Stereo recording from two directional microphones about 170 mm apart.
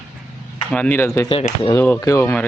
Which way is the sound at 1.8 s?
15° left (ahead or behind).